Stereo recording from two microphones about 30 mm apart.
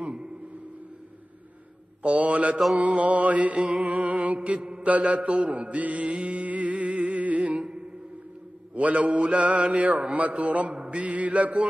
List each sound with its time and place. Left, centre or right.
0.0 s a sound: right
2.0 s mantra: right
2.8 s a man's voice: right
3.5 s music: right
3.8 s music: right
4.2 s mantra: right
4.6 s mantra: right
4.8 s a man's voice: right
6.5 s music: right
7.3 s music: right
8.7 s a man's voice: right